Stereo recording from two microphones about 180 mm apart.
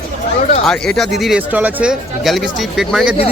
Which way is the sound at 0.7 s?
5° left (ahead or behind).